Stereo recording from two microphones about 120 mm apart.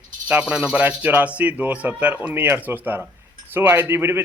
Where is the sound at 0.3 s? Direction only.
10° right (ahead or behind).